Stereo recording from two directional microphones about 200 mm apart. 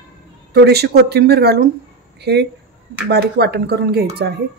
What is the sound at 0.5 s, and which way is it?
A woman's voice, 55° right (ahead or behind).